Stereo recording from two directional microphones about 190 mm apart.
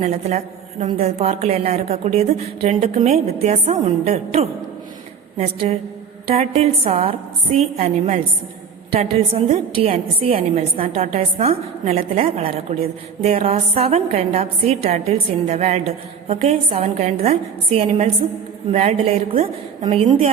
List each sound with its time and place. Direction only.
0.0 s a woman's voice: 35° right (ahead or behind)
6.2 s a woman's voice: 35° right (ahead or behind)